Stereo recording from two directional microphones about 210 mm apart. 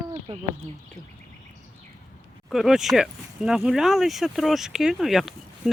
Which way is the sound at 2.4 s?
Centre (ahead or behind).